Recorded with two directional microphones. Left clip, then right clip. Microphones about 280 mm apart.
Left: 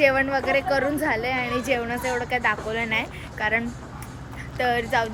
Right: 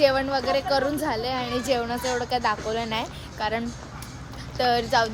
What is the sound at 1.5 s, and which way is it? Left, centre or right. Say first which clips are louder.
A woman's voice: even; centre.